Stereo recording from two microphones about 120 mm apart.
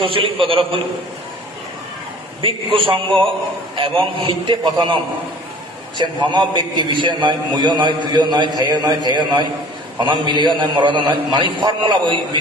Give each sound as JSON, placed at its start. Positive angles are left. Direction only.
{"t": 0.0, "sound": "a man's voice", "side_deg": -50}
{"t": 2.4, "sound": "a man's voice", "side_deg": -45}
{"t": 6.0, "sound": "a man's voice", "side_deg": -35}